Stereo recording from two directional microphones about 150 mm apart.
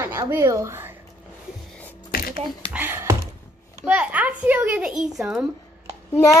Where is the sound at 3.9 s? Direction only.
10° right (ahead or behind).